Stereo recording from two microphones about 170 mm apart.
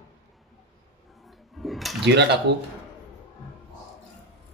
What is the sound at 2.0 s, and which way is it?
Speech, 80° right.